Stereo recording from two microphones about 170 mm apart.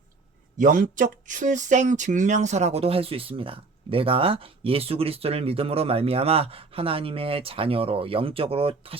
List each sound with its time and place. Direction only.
0.6 s speech: 50° right (ahead or behind); by 9.0 s 35° right (ahead or behind)